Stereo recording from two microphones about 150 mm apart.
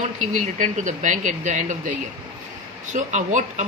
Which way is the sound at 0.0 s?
55° right (ahead or behind).